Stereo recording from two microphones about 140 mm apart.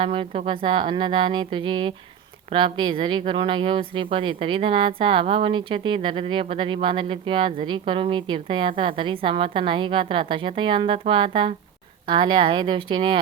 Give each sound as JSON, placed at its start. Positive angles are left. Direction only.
{"t": 0.0, "sound": "speech", "side_deg": -40}